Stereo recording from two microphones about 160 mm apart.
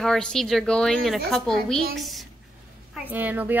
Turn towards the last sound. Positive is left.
turn(degrees=-10)  # may be behind; listen again after turning